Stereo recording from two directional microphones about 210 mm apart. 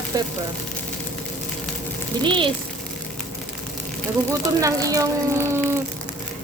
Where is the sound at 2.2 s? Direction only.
25° right (ahead or behind).